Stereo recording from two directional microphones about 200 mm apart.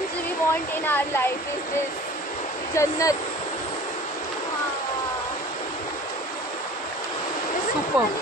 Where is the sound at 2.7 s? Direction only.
15° left (ahead or behind).